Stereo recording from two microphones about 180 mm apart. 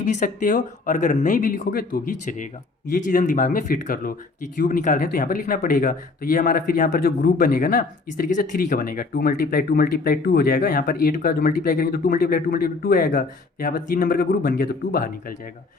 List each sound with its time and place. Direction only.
0.0 s speech: 45° left (ahead or behind)